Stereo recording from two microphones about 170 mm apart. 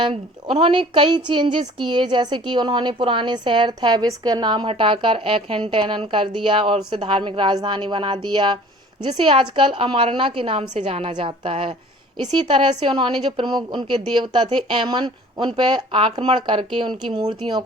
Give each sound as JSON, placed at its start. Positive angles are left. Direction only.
{"t": 0.0, "sound": "a woman's voice", "side_deg": -30}